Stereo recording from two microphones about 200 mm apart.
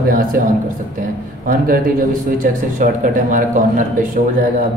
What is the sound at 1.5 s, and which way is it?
A man's voice, 45° right (ahead or behind).